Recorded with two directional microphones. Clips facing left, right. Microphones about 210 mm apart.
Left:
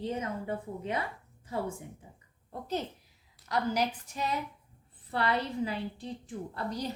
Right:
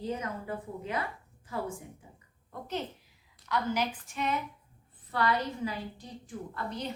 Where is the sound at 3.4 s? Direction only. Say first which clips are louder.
Left 1 dB; 40° left (ahead or behind).